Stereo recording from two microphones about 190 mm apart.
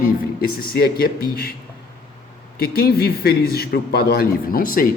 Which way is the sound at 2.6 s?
55° left (ahead or behind).